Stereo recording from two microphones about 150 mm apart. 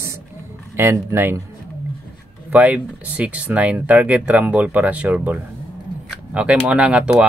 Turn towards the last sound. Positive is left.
turn(degrees=-5)  # may be behind; listen again after turning